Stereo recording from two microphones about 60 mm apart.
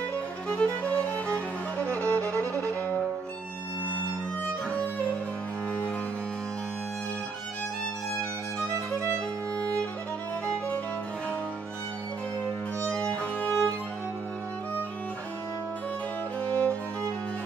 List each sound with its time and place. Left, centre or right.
0.5 s music: left
2.2 s music: right
13.0 s music: left
16.4 s music: left